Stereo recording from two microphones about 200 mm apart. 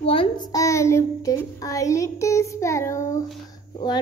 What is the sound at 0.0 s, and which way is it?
A child's voice, 25° left (ahead or behind).